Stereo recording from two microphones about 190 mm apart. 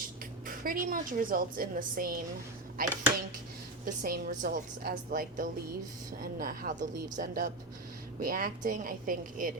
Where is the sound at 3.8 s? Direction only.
50° right (ahead or behind).